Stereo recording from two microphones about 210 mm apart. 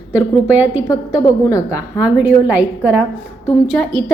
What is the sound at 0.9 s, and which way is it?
Speech, 15° left (ahead or behind).